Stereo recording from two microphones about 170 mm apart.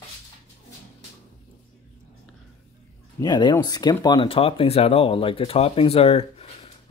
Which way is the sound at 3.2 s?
25° left (ahead or behind).